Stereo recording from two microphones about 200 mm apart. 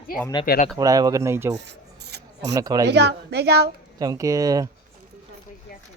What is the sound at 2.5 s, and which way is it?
Speech, 15° right (ahead or behind).